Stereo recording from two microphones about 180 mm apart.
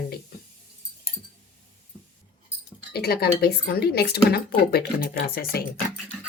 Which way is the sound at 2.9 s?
60° left (ahead or behind).